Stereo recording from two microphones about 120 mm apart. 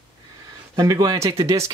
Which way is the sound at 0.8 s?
30° right (ahead or behind).